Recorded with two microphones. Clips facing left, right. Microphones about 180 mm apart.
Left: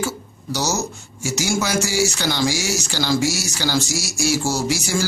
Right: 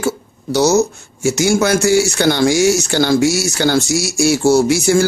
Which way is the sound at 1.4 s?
60° right (ahead or behind).